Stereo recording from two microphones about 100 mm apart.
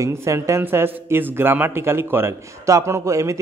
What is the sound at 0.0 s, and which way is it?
A man's voice, 30° right (ahead or behind).